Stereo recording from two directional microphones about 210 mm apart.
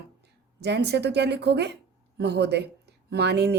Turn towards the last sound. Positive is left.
turn(degrees=-50)  # may be behind; listen again after turning